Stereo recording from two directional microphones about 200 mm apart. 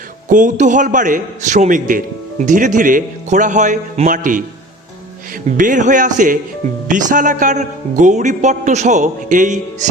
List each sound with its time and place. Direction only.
0.3 s a man's voice: 40° right (ahead or behind)
5.5 s a man's voice: 40° right (ahead or behind)